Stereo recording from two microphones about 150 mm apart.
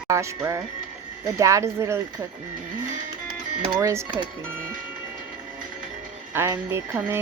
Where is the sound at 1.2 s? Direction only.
20° right (ahead or behind).